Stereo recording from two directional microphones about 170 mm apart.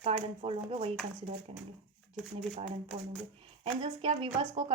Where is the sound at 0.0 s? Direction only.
35° right (ahead or behind).